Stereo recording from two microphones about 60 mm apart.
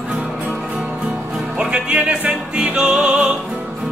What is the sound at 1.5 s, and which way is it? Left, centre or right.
Music, centre.